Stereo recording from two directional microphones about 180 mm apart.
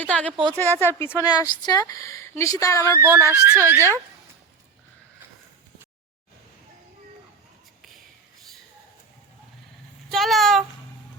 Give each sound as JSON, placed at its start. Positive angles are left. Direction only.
{"t": 0.0, "sound": "speech", "side_deg": 5}
{"t": 2.8, "sound": "speech", "side_deg": -15}
{"t": 10.1, "sound": "speech", "side_deg": 0}